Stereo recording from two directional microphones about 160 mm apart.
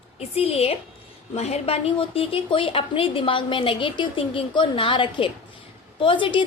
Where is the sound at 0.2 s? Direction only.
40° left (ahead or behind).